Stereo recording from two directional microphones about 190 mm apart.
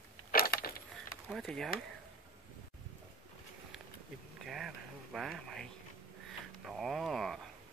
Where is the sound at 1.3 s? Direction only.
Centre (ahead or behind).